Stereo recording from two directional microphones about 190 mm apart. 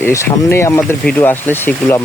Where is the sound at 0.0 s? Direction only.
15° left (ahead or behind).